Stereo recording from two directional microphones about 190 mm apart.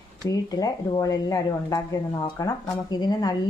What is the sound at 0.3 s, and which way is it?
Speech, 20° left (ahead or behind).